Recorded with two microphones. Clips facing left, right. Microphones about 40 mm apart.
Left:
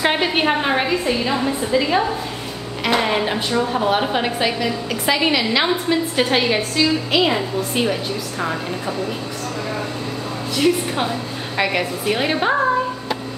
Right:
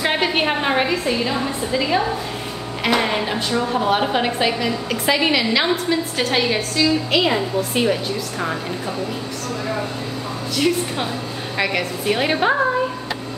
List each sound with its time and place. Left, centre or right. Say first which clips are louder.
0.0 s a woman's voice: left 1 dB; centre
10.6 s a woman's voice: left 2 dB; centre